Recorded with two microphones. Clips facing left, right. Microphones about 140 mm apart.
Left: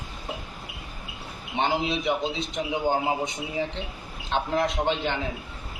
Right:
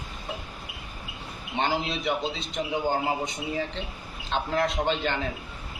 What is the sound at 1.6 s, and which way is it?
A man's voice, 20° left (ahead or behind).